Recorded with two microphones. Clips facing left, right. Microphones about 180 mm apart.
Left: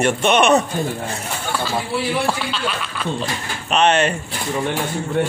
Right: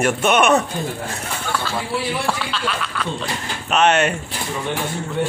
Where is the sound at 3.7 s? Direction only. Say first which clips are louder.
Even; 5° right (ahead or behind).